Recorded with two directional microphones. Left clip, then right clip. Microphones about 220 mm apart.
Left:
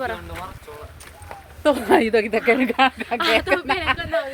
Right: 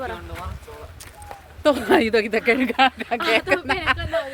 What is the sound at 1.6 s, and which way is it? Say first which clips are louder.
Speech: left 1 dB; 15° right (ahead or behind).